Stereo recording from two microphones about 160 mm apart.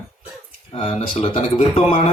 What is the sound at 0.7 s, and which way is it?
Speech, 40° left (ahead or behind).